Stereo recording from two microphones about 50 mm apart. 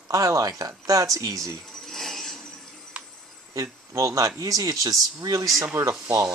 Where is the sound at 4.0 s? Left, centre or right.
Right.